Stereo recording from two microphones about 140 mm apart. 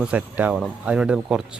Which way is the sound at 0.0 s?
10° right (ahead or behind).